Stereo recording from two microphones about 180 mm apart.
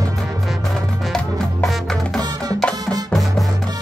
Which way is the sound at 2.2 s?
20° right (ahead or behind).